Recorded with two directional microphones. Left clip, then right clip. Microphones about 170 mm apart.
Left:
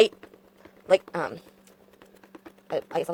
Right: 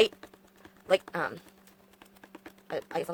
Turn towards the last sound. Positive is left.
turn(degrees=20)  # may be behind; listen again after turning